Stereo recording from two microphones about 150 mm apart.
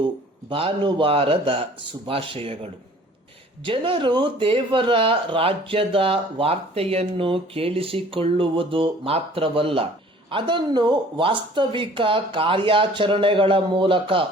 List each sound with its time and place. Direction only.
0.5 s speech: 35° right (ahead or behind)
3.6 s speech: 35° right (ahead or behind)